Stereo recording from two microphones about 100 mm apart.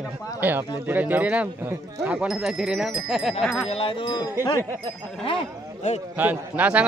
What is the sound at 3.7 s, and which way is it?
Speech, 65° left (ahead or behind).